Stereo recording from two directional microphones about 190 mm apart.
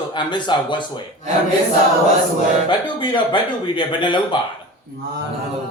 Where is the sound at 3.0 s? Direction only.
25° left (ahead or behind).